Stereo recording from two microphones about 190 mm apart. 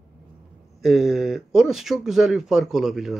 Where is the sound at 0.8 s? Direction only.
Centre (ahead or behind).